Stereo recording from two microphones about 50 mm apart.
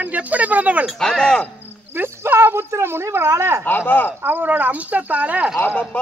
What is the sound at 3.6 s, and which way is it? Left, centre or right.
Speech, left.